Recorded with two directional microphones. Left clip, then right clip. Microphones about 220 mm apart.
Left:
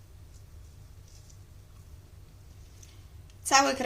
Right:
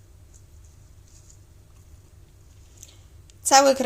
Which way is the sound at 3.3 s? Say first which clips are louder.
Right 7 dB; 35° right (ahead or behind).